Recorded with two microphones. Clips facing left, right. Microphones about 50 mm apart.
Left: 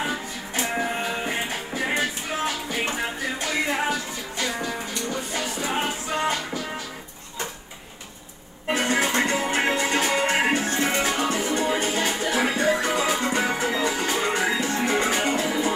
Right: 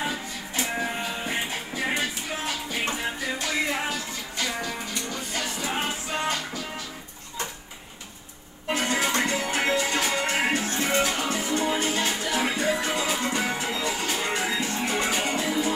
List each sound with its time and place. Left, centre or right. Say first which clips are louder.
0.0 s music: left 2 dB; left
2.4 s music: left 2 dB; left
8.7 s music: left 3 dB; left